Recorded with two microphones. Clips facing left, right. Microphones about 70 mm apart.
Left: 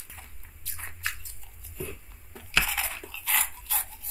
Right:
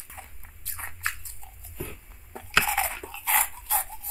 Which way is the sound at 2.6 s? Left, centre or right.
Right.